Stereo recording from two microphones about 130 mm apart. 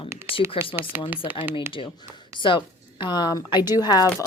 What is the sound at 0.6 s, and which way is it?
Speech, 45° left (ahead or behind).